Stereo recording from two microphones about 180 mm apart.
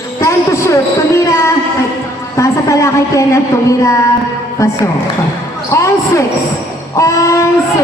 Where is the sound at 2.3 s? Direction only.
15° left (ahead or behind).